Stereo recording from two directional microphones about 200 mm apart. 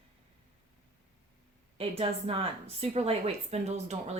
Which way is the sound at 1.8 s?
30° right (ahead or behind).